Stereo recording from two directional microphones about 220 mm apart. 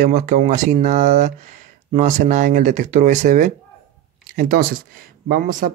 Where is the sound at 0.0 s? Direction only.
30° right (ahead or behind).